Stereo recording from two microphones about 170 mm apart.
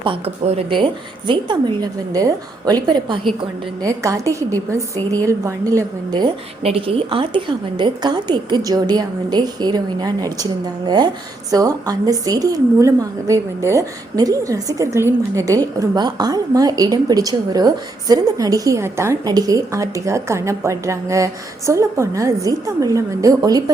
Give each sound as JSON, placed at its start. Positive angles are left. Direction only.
{"t": 0.0, "sound": "a woman's voice", "side_deg": -35}